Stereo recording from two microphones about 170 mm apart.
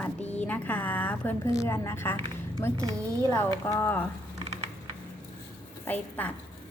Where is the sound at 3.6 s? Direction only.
15° left (ahead or behind).